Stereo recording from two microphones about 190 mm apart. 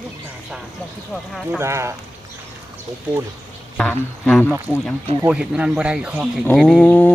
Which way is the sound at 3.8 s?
10° left (ahead or behind).